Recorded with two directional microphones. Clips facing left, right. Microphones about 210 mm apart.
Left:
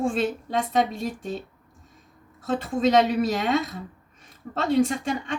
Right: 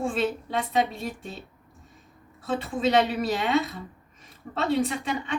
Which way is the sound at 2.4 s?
45° left (ahead or behind).